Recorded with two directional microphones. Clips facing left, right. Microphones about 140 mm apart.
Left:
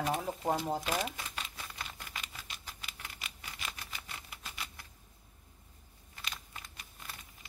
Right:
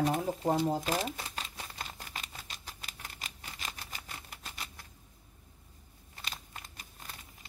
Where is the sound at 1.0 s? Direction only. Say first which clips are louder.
Right 2 dB; 35° right (ahead or behind).